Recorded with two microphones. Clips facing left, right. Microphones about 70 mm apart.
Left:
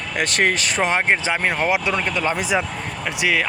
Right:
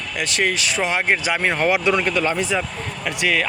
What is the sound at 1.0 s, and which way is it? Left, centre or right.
Speech, left.